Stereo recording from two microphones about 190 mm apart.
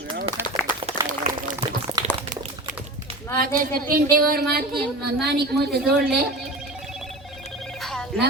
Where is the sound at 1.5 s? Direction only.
20° right (ahead or behind).